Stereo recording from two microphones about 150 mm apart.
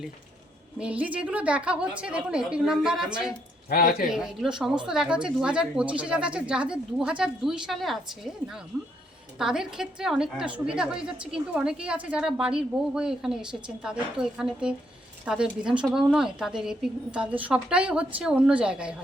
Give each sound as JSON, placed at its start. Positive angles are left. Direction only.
{"t": 0.8, "sound": "a woman's voice", "side_deg": -10}
{"t": 3.7, "sound": "speech", "side_deg": 70}
{"t": 4.1, "sound": "a woman's voice", "side_deg": -5}